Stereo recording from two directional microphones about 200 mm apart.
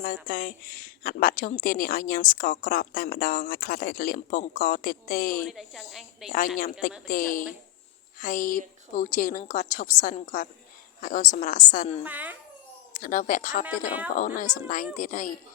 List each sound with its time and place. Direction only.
0.0 s a woman's voice: 45° left (ahead or behind)
5.4 s speech: centre (ahead or behind)
7.1 s a woman's voice: 45° left (ahead or behind)
12.0 s speech: 10° right (ahead or behind)
12.9 s a woman's voice: 40° left (ahead or behind)